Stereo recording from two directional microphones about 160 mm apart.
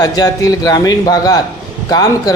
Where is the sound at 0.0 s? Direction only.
25° left (ahead or behind).